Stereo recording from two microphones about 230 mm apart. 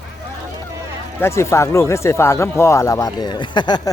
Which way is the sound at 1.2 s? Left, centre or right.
Centre.